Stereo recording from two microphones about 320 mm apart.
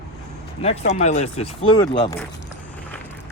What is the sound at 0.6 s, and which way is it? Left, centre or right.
Speech, centre.